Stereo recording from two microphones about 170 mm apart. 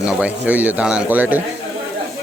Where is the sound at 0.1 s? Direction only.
10° right (ahead or behind).